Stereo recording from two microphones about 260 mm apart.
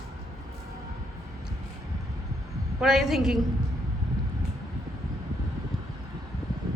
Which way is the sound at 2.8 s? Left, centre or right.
Centre.